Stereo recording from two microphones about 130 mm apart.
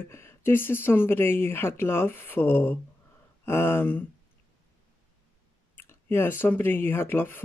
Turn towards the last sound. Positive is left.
turn(degrees=15)  # may be behind; listen again after turning